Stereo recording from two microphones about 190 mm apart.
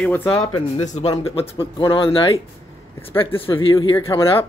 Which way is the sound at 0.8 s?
35° left (ahead or behind).